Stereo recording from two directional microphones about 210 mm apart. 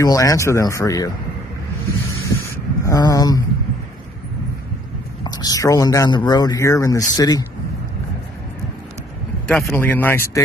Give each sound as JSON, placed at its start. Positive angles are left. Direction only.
{"t": 0.0, "sound": "speech", "side_deg": 15}
{"t": 2.4, "sound": "a sound", "side_deg": 15}
{"t": 5.2, "sound": "speech", "side_deg": 20}
{"t": 9.5, "sound": "speech", "side_deg": 5}